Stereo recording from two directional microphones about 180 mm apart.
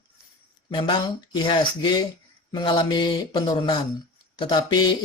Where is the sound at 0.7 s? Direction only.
25° left (ahead or behind).